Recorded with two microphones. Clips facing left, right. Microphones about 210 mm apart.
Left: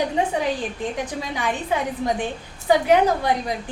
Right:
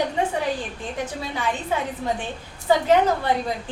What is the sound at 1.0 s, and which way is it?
A woman's voice, 15° left (ahead or behind).